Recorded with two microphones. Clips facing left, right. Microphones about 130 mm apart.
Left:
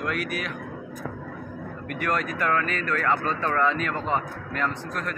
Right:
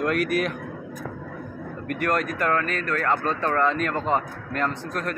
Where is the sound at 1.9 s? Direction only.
45° right (ahead or behind).